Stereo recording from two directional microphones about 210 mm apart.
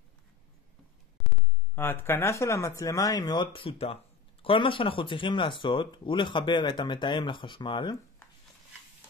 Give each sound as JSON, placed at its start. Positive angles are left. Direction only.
{"t": 1.8, "sound": "speech", "side_deg": 10}